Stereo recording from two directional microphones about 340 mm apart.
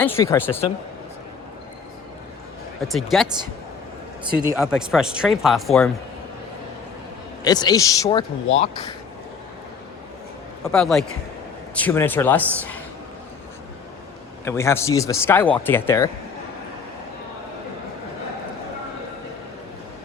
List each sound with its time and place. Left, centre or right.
0.0 s speech: centre
2.8 s speech: centre
4.4 s speech: centre
7.4 s speech: centre
10.6 s speech: centre
14.4 s speech: centre